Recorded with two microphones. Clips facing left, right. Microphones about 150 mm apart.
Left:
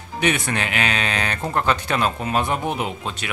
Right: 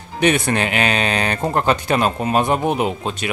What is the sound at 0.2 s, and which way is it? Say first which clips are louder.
Speech: right 5 dB; 35° right (ahead or behind).